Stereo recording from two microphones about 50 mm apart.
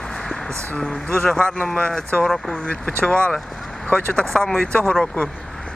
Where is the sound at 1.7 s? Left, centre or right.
Left.